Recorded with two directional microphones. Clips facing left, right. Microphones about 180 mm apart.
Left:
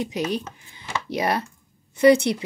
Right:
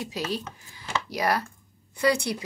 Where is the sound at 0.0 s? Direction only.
20° left (ahead or behind).